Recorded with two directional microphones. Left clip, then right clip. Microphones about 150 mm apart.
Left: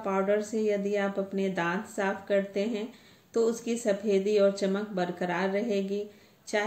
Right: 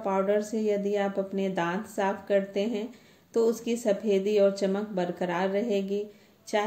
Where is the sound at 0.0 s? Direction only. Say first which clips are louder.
Right 1 dB; 20° right (ahead or behind).